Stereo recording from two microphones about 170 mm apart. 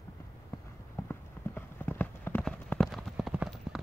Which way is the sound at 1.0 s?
10° left (ahead or behind).